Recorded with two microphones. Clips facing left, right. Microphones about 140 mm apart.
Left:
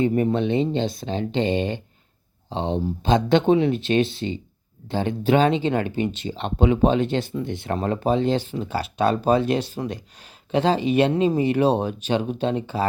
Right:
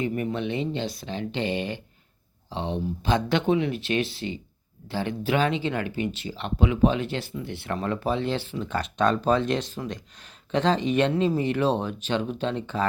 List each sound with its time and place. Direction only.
0.0 s speech: 35° left (ahead or behind)
8.6 s speech: 5° left (ahead or behind)